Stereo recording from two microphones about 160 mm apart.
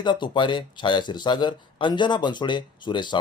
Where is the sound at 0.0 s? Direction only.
30° left (ahead or behind).